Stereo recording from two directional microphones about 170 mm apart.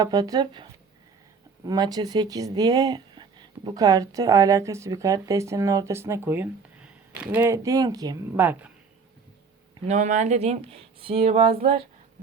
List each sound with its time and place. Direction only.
0.0 s speech: 20° right (ahead or behind)
8.4 s speech: 10° right (ahead or behind)
9.8 s speech: 45° right (ahead or behind)